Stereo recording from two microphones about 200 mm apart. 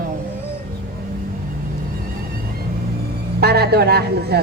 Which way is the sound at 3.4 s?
55° right (ahead or behind).